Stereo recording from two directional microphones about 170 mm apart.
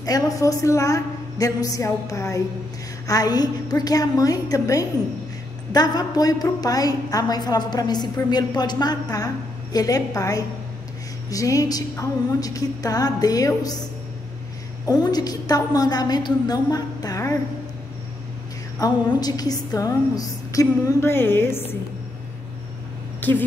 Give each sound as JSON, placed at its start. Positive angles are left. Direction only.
{"t": 0.0, "sound": "a woman's voice", "side_deg": 20}
{"t": 14.9, "sound": "a woman's voice", "side_deg": 25}
{"t": 18.8, "sound": "a woman's voice", "side_deg": 20}